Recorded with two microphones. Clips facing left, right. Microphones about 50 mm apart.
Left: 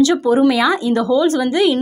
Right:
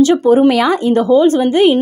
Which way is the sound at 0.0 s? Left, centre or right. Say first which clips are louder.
Right 4 dB; right.